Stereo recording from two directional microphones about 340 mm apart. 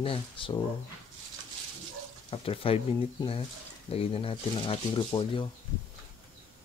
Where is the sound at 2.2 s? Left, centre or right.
Centre.